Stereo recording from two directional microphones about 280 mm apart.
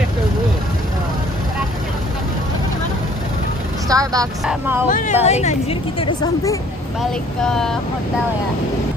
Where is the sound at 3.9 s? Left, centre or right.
Centre.